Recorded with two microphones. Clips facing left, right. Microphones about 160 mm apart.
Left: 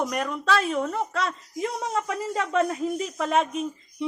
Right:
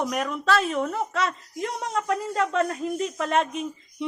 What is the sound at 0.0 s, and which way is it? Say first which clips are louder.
A woman's voice: right 1 dB; centre (ahead or behind).